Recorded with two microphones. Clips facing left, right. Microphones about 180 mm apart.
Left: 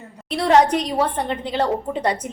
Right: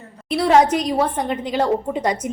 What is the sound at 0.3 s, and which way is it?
A woman's voice, 10° right (ahead or behind).